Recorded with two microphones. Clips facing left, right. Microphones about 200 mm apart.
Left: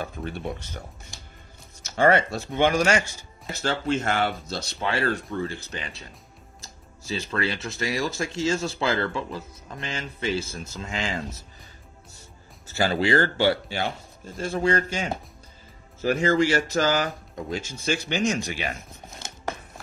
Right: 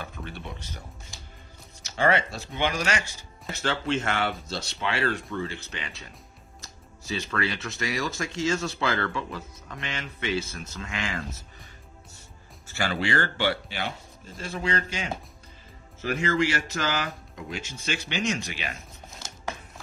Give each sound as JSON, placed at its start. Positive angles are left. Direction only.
{"t": 0.0, "sound": "speech", "side_deg": 40}
{"t": 12.6, "sound": "speech", "side_deg": 35}